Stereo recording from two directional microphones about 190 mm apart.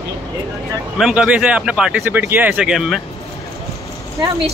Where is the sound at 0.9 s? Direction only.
Centre (ahead or behind).